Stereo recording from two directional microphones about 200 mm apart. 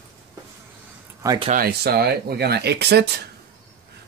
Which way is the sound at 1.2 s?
20° right (ahead or behind).